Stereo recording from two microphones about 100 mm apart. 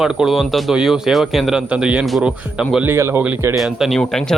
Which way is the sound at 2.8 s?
25° right (ahead or behind).